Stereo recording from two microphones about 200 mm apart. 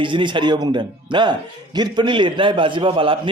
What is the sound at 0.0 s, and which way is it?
A man's voice, 25° right (ahead or behind).